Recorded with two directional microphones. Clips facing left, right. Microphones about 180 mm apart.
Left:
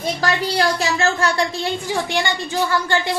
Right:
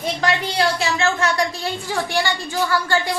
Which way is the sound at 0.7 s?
40° left (ahead or behind).